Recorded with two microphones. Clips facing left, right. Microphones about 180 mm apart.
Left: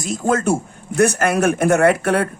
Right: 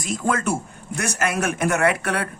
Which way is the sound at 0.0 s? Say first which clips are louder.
Left 4 dB; 45° left (ahead or behind).